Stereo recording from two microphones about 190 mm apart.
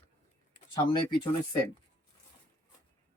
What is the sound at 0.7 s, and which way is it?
Speech, 25° left (ahead or behind).